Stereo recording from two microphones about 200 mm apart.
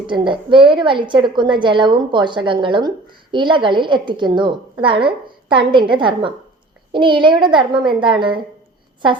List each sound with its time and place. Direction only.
0.1 s a woman's voice: 25° right (ahead or behind)